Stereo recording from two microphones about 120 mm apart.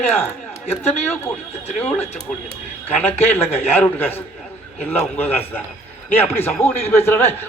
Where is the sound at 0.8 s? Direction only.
15° left (ahead or behind).